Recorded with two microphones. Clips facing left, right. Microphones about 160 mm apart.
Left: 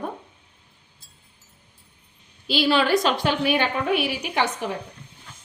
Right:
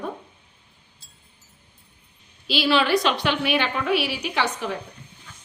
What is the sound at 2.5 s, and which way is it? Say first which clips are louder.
A woman's voice: left 1 dB; 45° left (ahead or behind).